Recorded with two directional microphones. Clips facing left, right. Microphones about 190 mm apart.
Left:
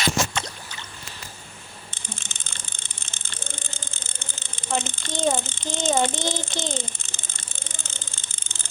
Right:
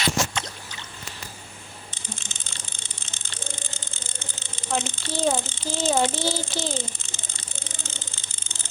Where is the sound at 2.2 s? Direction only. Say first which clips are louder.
Right 1 dB; 55° left (ahead or behind).